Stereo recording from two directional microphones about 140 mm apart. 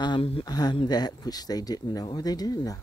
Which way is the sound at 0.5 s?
30° left (ahead or behind).